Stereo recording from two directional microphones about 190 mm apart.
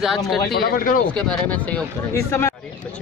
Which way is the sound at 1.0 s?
5° left (ahead or behind).